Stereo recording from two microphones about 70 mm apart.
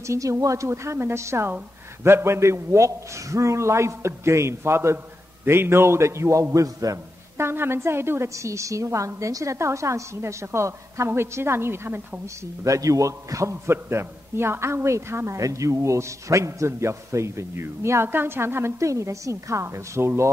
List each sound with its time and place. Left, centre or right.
0.0 s a man's voice: right
7.3 s a woman's voice: right
12.6 s a man's voice: right